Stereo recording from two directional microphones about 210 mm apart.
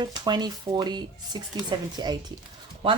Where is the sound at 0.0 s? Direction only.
20° right (ahead or behind).